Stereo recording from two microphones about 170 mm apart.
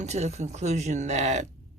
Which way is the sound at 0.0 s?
40° right (ahead or behind).